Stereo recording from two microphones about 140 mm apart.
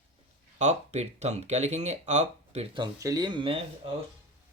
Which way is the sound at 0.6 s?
50° right (ahead or behind).